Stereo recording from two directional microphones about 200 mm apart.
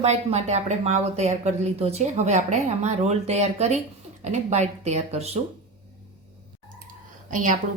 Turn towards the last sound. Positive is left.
turn(degrees=-40)  # may be behind; listen again after turning